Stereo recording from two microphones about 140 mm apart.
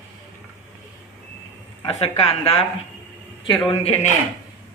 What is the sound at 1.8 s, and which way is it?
Speech, 45° left (ahead or behind).